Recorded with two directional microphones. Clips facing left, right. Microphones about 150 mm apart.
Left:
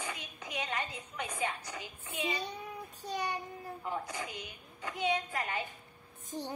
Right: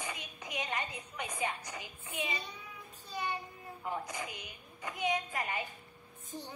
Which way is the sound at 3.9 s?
15° right (ahead or behind).